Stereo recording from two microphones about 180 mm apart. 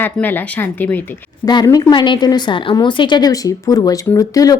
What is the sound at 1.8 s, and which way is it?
A woman's voice, 25° left (ahead or behind).